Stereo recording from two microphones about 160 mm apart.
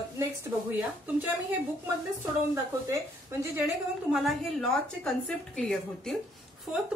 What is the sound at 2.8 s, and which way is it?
Speech, 20° right (ahead or behind).